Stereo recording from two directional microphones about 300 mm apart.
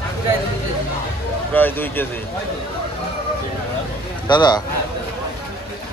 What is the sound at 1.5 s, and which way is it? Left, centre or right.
Speech, centre.